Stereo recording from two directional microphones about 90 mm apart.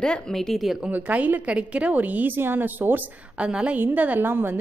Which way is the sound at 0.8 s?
15° right (ahead or behind).